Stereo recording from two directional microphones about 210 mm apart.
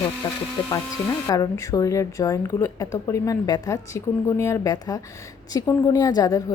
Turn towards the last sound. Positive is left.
turn(degrees=15)  # may be behind; listen again after turning